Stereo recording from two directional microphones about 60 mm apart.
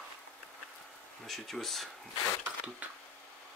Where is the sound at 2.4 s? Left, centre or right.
Right.